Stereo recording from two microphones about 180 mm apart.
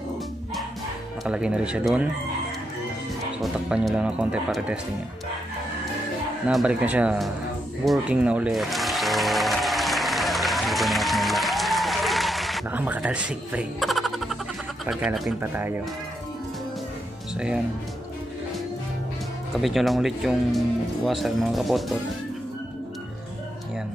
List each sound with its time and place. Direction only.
1.2 s speech: 5° right (ahead or behind)
3.5 s speech: 5° right (ahead or behind)
6.4 s speech: 5° right (ahead or behind)
7.8 s music: 5° right (ahead or behind)
14.9 s speech: 5° right (ahead or behind)
19.5 s speech: centre (ahead or behind)